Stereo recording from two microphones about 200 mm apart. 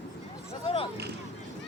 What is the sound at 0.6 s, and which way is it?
Speech, 30° left (ahead or behind).